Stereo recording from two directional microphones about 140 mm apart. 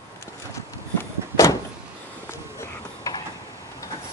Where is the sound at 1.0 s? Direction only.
20° left (ahead or behind).